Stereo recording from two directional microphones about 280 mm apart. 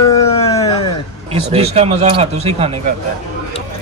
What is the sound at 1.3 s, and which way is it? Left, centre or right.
Speech, right.